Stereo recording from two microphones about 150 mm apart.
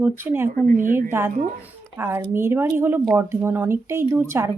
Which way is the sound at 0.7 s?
65° right (ahead or behind).